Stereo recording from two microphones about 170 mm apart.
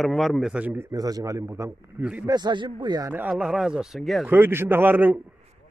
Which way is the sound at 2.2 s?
25° right (ahead or behind).